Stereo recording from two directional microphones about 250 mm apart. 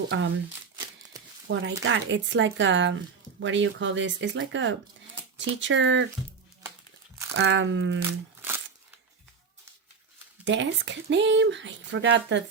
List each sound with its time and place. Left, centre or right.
0.1 s speech: right
1.5 s speech: right
7.3 s speech: right
8.4 s crumpling: centre
10.4 s speech: right